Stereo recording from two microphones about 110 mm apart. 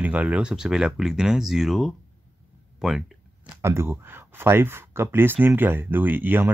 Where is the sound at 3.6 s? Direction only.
25° right (ahead or behind).